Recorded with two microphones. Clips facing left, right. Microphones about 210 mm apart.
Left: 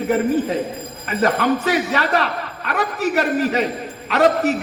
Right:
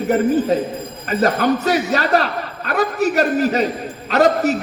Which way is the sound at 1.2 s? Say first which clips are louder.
Right 1 dB; 40° right (ahead or behind).